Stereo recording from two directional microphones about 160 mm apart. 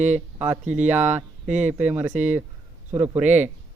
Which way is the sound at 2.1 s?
50° right (ahead or behind).